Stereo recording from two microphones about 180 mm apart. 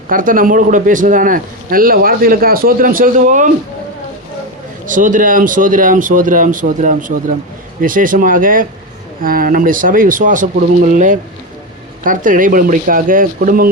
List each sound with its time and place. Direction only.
0.1 s speech: 50° right (ahead or behind)
4.9 s speech: 45° right (ahead or behind)